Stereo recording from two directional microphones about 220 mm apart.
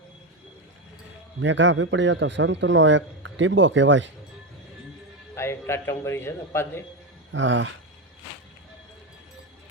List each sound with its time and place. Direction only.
1.4 s a man's voice: 55° right (ahead or behind)
5.3 s a man's voice: 10° left (ahead or behind)
7.3 s a man's voice: 55° right (ahead or behind)